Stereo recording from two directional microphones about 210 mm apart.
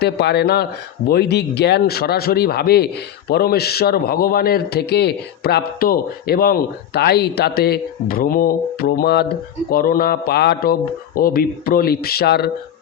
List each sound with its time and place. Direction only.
0.0 s a man's voice: 50° left (ahead or behind)